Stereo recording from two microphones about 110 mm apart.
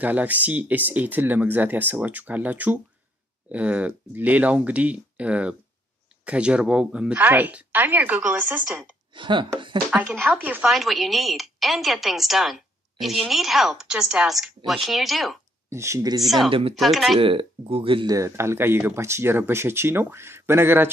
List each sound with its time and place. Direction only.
0.0 s speech: 15° right (ahead or behind)
9.1 s speech: 45° right (ahead or behind)
10.0 s speech: 20° right (ahead or behind)
10.7 s a woman's voice: centre (ahead or behind)
15.7 s speech: 25° right (ahead or behind)
16.4 s speech: 55° right (ahead or behind)
16.7 s a woman's voice: centre (ahead or behind)
17.2 s speech: 55° right (ahead or behind)
18.0 s speech: 30° right (ahead or behind)